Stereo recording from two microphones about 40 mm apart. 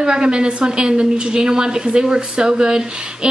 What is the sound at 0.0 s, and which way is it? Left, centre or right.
A woman's voice, right.